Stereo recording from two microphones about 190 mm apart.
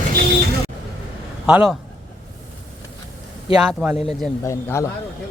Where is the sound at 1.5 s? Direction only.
5° right (ahead or behind).